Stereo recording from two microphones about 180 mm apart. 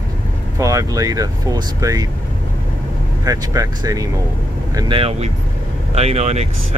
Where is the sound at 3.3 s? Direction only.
20° right (ahead or behind).